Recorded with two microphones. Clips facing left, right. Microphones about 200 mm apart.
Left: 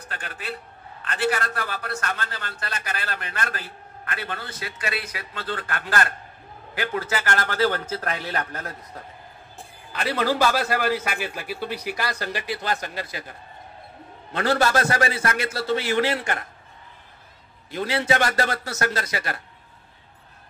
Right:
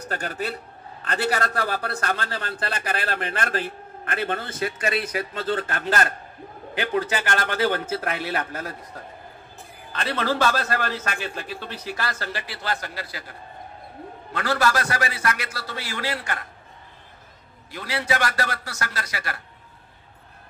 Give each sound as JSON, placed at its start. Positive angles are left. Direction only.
{"t": 0.1, "sound": "a man's voice", "side_deg": -40}
{"t": 9.9, "sound": "a man's voice", "side_deg": 10}
{"t": 14.3, "sound": "a man's voice", "side_deg": 25}
{"t": 17.6, "sound": "a man's voice", "side_deg": 25}